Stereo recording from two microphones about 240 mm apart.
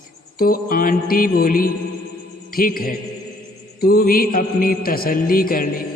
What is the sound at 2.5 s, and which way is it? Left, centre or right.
Music, left.